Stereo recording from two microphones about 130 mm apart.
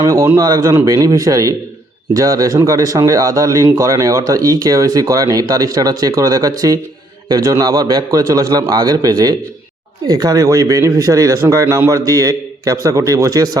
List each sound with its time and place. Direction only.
0.0 s a man's voice: 25° right (ahead or behind)